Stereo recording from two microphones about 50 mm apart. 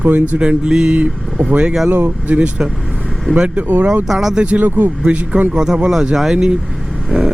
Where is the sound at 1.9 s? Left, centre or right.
Right.